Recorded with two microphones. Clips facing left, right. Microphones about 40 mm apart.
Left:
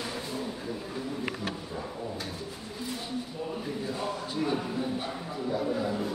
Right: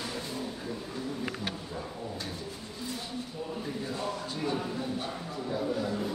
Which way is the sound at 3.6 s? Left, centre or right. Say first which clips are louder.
Left 1 dB; centre.